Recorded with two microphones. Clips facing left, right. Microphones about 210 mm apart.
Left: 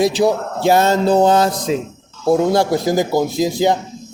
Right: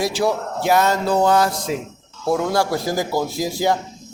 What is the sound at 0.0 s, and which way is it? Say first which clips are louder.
A man's voice: left 5 dB; 20° left (ahead or behind).